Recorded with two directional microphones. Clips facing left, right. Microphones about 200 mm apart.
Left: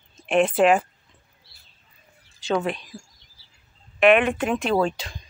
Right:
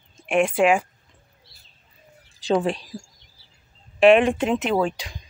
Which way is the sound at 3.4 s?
55° right (ahead or behind).